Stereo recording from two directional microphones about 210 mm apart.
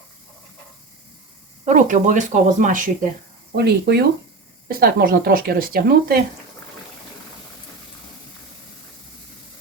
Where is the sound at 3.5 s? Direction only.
50° right (ahead or behind).